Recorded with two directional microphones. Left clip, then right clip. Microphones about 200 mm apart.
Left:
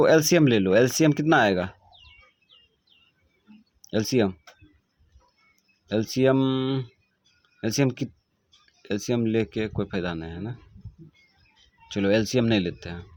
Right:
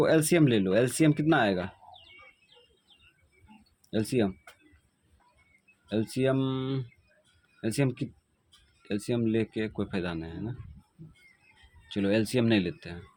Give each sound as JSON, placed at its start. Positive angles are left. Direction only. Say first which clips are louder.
{"t": 0.0, "sound": "speech", "louder": "left 5 dB", "side_deg": 30}
{"t": 3.8, "sound": "speech", "louder": "left 5 dB", "side_deg": 30}
{"t": 5.9, "sound": "speech", "louder": "left 6 dB", "side_deg": 30}
{"t": 11.9, "sound": "speech", "louder": "left 5 dB", "side_deg": 30}